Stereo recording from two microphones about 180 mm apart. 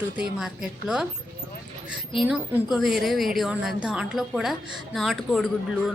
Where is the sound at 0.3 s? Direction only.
5° right (ahead or behind).